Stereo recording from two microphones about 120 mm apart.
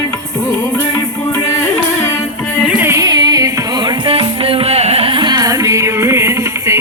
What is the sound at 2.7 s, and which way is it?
Music, 10° right (ahead or behind).